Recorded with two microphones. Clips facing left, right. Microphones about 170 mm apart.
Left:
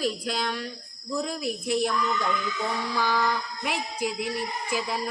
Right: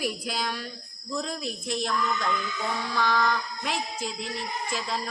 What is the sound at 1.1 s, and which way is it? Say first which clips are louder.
Speech: left 2 dB; 10° left (ahead or behind).